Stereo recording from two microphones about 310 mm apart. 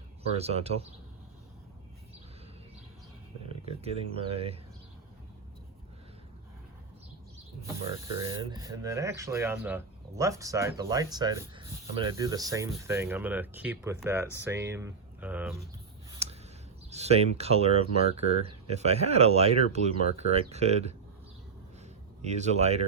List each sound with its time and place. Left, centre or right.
0.2 s speech: centre
3.5 s speech: centre
8.2 s speech: centre
16.2 s a sound: centre
16.9 s speech: right
22.2 s speech: right